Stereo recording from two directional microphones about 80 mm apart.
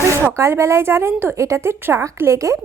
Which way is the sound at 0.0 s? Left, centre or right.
Right.